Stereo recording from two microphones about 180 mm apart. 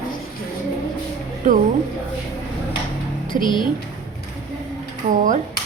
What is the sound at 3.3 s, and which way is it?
Speech, 25° left (ahead or behind).